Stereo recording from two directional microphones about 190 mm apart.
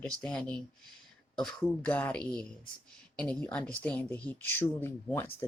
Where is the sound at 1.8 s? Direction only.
10° left (ahead or behind).